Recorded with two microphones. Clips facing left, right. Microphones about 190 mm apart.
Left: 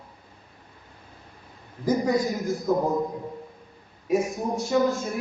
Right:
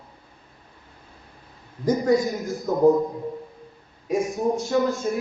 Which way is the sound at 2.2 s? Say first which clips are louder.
Even; centre (ahead or behind).